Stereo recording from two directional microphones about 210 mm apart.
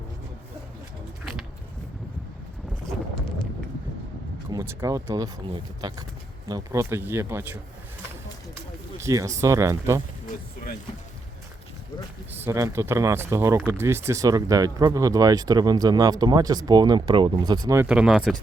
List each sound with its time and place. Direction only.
4.5 s speech: 10° right (ahead or behind)
9.0 s speech: 15° right (ahead or behind)
12.3 s speech: 10° right (ahead or behind)
17.8 s speech: 5° right (ahead or behind)